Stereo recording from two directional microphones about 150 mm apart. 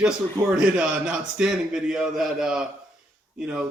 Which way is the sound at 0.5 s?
5° right (ahead or behind).